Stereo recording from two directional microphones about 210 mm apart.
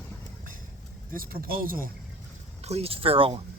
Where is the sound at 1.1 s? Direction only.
45° right (ahead or behind).